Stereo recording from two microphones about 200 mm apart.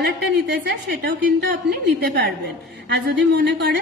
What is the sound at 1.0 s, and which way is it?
A woman's voice, 55° right (ahead or behind).